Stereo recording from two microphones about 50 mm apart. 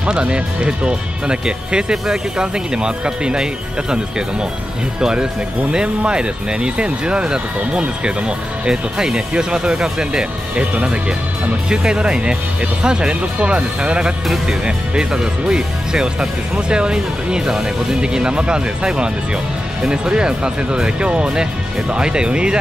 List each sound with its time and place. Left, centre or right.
0.0 s speech: centre
5.0 s speech: centre